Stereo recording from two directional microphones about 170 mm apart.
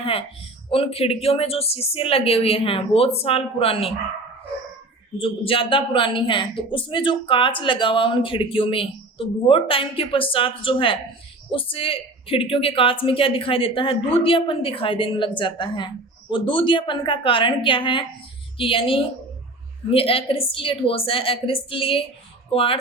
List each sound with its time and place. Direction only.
0.0 s speech: 35° left (ahead or behind)
5.2 s a woman's voice: 30° left (ahead or behind)